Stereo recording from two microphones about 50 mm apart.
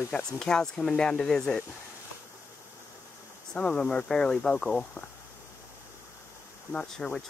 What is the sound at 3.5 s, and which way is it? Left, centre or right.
Speech, left.